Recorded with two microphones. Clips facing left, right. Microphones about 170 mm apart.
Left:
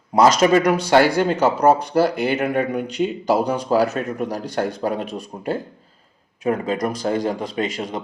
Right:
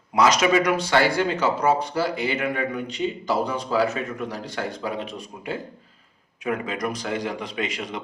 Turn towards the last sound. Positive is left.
turn(degrees=45)  # may be behind; listen again after turning